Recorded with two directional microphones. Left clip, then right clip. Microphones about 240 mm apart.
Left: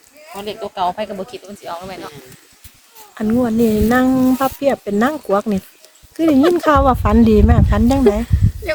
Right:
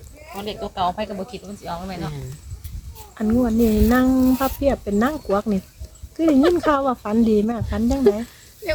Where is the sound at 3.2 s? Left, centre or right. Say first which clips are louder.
Left 3 dB; left.